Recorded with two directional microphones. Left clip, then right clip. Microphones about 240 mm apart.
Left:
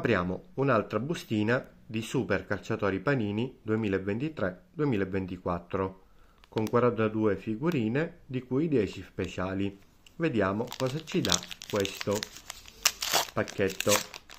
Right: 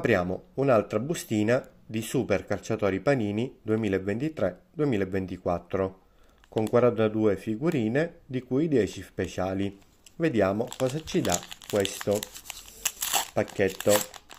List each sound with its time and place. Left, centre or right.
0.0 s speech: centre
12.8 s crumpling: centre
13.3 s speech: centre